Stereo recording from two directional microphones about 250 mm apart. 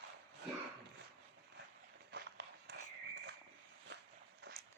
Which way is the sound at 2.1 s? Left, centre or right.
Right.